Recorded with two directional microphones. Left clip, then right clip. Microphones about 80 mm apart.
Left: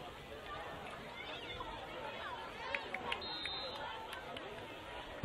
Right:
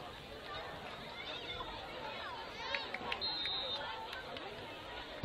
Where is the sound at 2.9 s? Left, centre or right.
Right.